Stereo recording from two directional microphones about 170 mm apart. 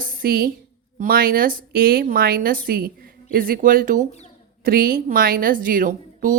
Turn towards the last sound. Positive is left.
turn(degrees=-55)  # may be behind; listen again after turning